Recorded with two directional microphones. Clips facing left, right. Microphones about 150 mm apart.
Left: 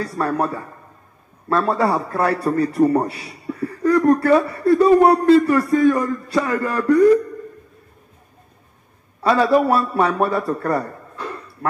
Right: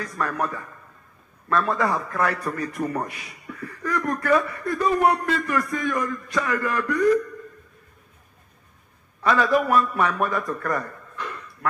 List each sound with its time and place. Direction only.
0.0 s a man's voice: 35° left (ahead or behind)
9.2 s a man's voice: 30° left (ahead or behind)